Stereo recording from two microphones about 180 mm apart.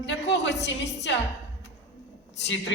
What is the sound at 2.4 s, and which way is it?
Speech, 80° left.